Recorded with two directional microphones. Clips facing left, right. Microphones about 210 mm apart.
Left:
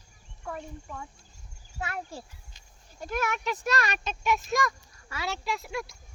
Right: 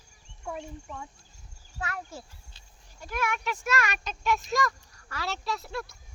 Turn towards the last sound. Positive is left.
turn(degrees=15)  # may be behind; listen again after turning